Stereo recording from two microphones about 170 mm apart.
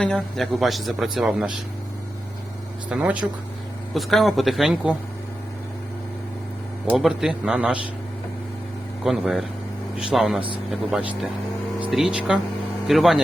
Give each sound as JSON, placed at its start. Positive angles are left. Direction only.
{"t": 0.0, "sound": "speech", "side_deg": 5}
{"t": 2.9, "sound": "speech", "side_deg": -10}
{"t": 6.9, "sound": "speech", "side_deg": 0}
{"t": 9.0, "sound": "speech", "side_deg": 0}